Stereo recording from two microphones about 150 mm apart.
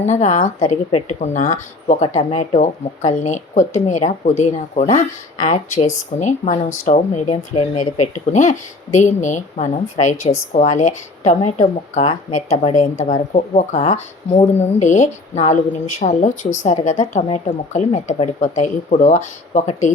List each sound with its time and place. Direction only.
0.0 s speech: 50° left (ahead or behind)